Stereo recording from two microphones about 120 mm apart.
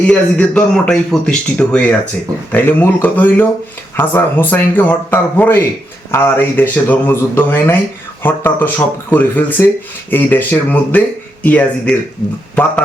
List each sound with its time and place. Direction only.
0.0 s speech: 10° left (ahead or behind)